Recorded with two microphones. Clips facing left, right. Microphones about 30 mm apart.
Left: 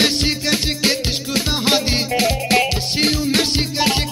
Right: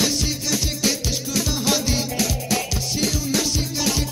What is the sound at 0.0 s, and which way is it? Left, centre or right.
Music, left.